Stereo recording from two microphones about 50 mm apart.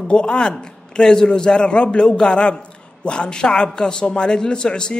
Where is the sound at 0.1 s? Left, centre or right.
Centre.